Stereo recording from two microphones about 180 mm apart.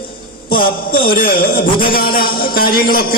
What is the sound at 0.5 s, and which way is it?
A man's voice, 50° left (ahead or behind).